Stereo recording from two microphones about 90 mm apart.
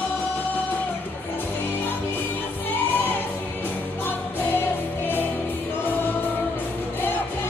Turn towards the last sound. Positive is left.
turn(degrees=20)  # may be behind; listen again after turning